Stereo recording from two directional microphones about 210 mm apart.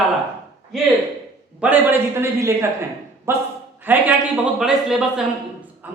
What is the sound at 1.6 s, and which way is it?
A woman's voice, 10° right (ahead or behind).